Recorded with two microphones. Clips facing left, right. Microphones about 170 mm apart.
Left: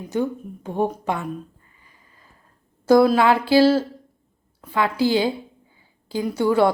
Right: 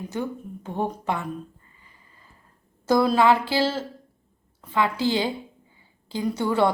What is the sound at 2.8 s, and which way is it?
Speech, 10° left (ahead or behind).